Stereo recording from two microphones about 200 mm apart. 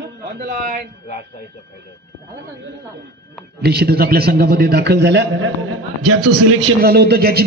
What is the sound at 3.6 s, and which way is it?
A man's voice, 55° right (ahead or behind).